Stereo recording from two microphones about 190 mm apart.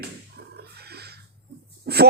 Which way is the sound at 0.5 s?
55° right (ahead or behind).